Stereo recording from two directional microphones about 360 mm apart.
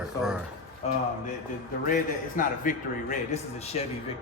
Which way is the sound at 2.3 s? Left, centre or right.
Left.